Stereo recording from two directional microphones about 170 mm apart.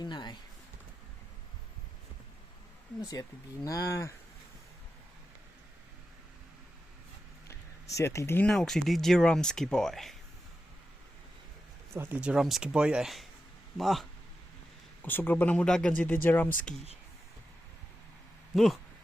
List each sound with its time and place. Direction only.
0.0 s speech: 25° left (ahead or behind)
3.0 s speech: 20° left (ahead or behind)
7.9 s speech: 15° left (ahead or behind); by 10.2 s centre (ahead or behind)
11.9 s speech: 10° right (ahead or behind)
15.0 s speech: 10° left (ahead or behind)
18.5 s speech: centre (ahead or behind)